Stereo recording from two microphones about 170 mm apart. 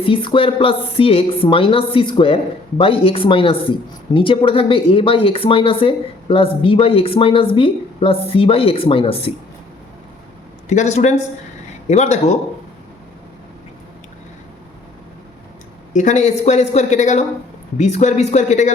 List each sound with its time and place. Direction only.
0.0 s speech: 30° left (ahead or behind)
10.7 s a woman's voice: 40° left (ahead or behind)
15.9 s a woman's voice: 45° left (ahead or behind)